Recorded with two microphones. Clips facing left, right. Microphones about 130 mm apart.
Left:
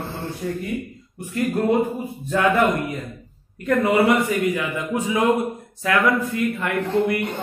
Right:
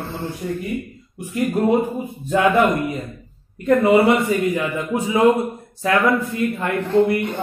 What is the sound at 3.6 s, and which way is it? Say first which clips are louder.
A man's voice: right 4 dB; 25° right (ahead or behind).